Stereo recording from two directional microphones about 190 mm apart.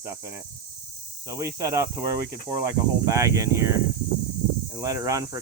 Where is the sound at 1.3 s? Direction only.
15° right (ahead or behind).